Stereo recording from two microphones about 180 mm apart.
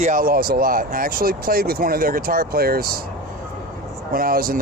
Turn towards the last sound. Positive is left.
turn(degrees=-55)  # may be behind; listen again after turning